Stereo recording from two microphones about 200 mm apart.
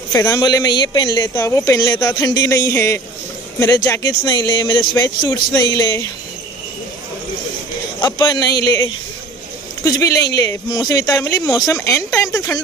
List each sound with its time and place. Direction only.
0.1 s speech: 15° left (ahead or behind)
8.0 s speech: 20° left (ahead or behind)